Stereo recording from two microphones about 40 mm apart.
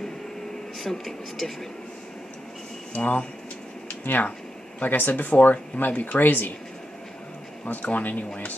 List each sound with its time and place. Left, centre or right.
0.7 s speech: centre
2.9 s speech: left
4.0 s speech: left
7.6 s speech: left